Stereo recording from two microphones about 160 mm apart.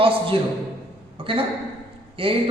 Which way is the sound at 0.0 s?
35° right (ahead or behind).